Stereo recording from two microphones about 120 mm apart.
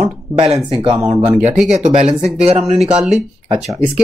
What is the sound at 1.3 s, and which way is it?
Speech, 10° right (ahead or behind).